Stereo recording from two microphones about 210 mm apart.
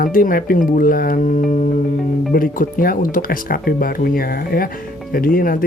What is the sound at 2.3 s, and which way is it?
Speech, 40° left (ahead or behind).